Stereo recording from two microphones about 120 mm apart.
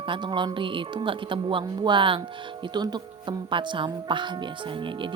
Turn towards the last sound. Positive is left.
turn(degrees=-45)  # may be behind; listen again after turning